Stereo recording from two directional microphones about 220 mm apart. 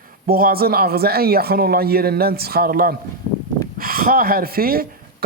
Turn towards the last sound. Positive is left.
turn(degrees=-40)  # may be behind; listen again after turning